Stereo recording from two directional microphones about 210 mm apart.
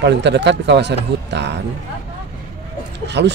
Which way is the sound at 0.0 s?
55° right (ahead or behind).